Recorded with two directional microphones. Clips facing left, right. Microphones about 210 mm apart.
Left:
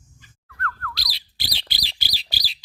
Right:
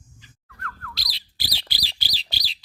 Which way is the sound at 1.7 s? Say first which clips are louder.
Left 1 dB; 20° left (ahead or behind).